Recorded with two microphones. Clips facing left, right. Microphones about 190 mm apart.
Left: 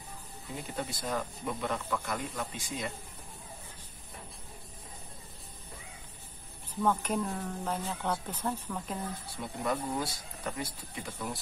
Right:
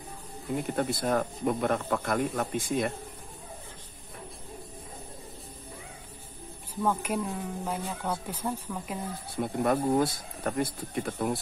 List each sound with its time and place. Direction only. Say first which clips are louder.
0.6 s speech: right 8 dB; 55° right (ahead or behind)
6.7 s speech: right 1 dB; 10° right (ahead or behind)
9.4 s speech: right 7 dB; 55° right (ahead or behind)